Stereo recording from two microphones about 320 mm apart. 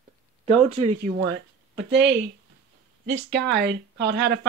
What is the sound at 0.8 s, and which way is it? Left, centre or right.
Speech, right.